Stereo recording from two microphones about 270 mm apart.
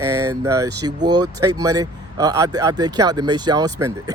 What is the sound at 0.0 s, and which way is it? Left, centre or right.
Speech, centre.